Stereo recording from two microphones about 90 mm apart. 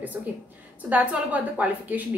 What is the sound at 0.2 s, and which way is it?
A woman's voice, 20° right (ahead or behind).